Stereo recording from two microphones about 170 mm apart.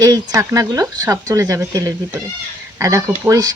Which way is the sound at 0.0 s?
20° right (ahead or behind).